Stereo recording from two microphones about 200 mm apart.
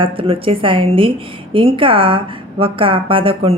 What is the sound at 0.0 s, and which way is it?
A woman's voice, 25° right (ahead or behind).